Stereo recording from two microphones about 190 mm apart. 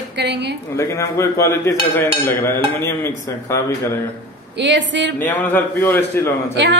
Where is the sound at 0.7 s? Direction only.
15° left (ahead or behind).